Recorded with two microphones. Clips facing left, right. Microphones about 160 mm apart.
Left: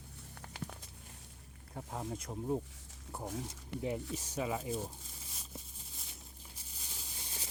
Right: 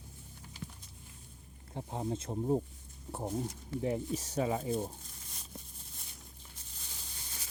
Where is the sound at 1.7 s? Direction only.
25° right (ahead or behind).